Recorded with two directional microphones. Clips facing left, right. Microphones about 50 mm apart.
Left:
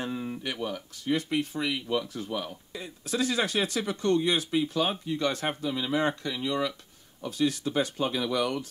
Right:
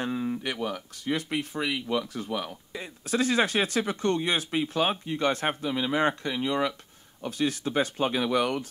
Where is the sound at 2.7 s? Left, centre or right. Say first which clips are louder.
Right 2 dB; right.